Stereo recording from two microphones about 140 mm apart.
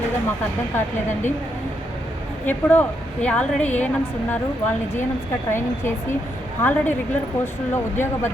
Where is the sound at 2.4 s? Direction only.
10° left (ahead or behind).